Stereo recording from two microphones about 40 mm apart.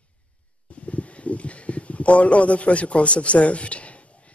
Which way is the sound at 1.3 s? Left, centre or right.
Left.